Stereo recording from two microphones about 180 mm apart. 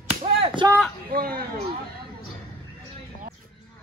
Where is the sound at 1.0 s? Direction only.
55° right (ahead or behind).